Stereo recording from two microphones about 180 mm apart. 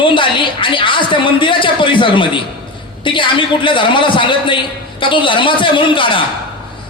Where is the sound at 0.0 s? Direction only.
30° left (ahead or behind).